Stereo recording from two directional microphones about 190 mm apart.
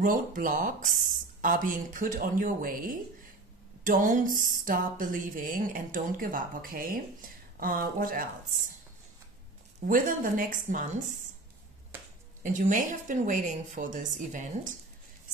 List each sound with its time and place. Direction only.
0.0 s speech: 45° right (ahead or behind)
9.8 s speech: 45° right (ahead or behind)
12.4 s a woman's voice: 45° right (ahead or behind)